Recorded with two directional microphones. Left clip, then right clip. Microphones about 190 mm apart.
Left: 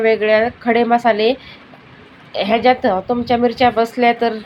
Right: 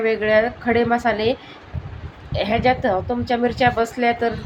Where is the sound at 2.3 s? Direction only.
20° left (ahead or behind).